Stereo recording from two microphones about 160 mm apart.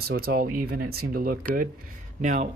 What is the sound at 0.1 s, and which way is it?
Speech, 70° right (ahead or behind).